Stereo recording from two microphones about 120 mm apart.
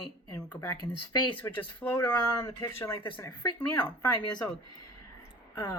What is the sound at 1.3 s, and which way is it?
Speech, 15° left (ahead or behind).